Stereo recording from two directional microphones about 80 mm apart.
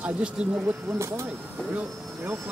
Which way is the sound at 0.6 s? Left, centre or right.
Right.